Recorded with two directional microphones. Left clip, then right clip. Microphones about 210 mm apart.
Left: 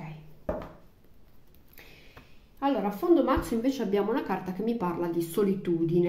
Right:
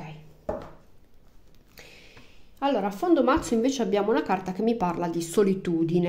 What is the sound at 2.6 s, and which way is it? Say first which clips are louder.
A woman's voice: right 3 dB; 45° right (ahead or behind).